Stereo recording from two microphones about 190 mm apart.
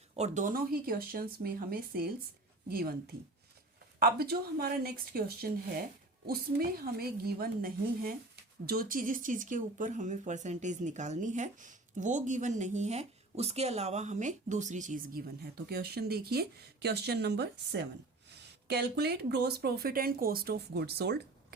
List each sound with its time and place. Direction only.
0.1 s speech: 40° right (ahead or behind)
4.0 s speech: 55° right (ahead or behind)